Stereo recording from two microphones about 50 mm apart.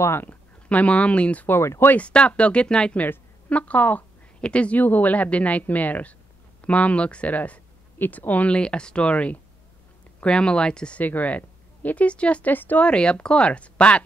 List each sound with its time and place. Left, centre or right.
0.7 s speech: left
8.5 s speech: centre
11.0 s speech: left
12.5 s speech: left
12.8 s speech: left